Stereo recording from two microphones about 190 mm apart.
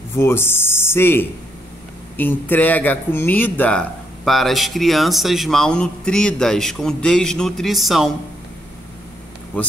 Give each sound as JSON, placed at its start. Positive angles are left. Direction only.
{"t": 0.1, "sound": "speech", "side_deg": 10}